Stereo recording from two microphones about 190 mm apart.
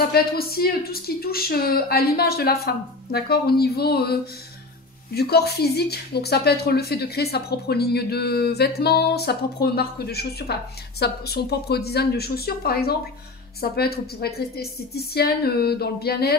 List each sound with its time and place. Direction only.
0.1 s a woman's voice: 55° left (ahead or behind)